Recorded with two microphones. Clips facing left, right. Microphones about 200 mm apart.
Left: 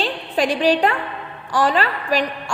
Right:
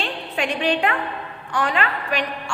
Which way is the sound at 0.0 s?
35° left (ahead or behind).